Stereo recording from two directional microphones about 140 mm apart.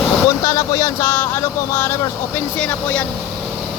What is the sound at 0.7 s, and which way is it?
Speech, 20° left (ahead or behind).